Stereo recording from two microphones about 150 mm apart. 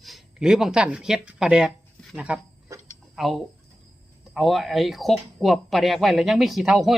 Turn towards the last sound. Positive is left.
turn(degrees=0)  # may be behind; listen again after turning